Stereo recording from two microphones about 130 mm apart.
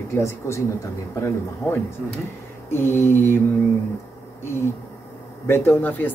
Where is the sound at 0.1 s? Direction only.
20° left (ahead or behind).